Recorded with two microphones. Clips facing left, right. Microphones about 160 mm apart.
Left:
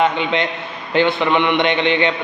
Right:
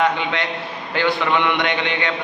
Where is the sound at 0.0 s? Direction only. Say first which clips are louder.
Left 3 dB; 20° left (ahead or behind).